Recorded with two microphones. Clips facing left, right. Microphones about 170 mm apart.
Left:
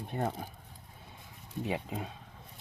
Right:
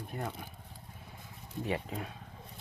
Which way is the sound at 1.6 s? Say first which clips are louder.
Even; 20° left (ahead or behind).